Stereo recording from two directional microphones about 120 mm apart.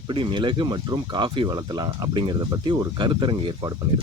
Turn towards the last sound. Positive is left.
turn(degrees=-40)  # may be behind; listen again after turning